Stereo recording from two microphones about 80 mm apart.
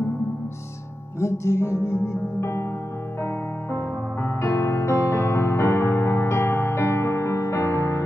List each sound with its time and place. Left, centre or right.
1.2 s music: left
3.7 s music: left